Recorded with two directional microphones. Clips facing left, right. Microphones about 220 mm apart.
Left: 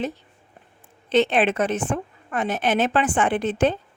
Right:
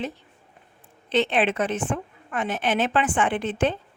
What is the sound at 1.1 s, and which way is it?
A woman's voice, 45° left (ahead or behind).